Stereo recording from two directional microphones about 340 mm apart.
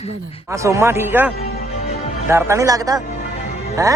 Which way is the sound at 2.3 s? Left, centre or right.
Centre.